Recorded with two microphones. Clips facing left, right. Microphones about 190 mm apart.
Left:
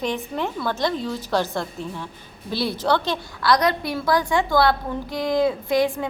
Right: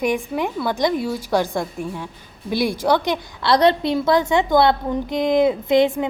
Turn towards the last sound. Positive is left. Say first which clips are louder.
# right 4 dB
turn(degrees=-20)  # may be behind; listen again after turning